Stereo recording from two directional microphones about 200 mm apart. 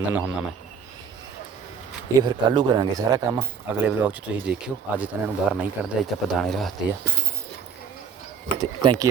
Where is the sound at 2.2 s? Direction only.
25° right (ahead or behind).